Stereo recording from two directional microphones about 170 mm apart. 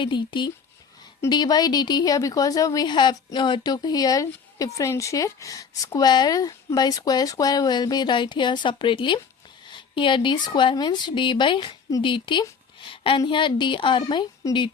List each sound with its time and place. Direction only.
0.0 s speech: 30° left (ahead or behind)